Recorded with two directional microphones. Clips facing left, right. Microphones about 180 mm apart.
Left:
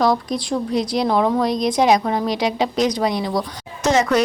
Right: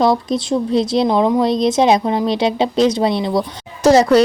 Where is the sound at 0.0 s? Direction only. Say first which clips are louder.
Right 3 dB; 25° right (ahead or behind).